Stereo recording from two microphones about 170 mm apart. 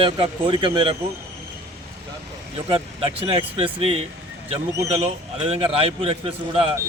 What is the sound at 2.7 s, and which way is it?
Speech, 35° right (ahead or behind).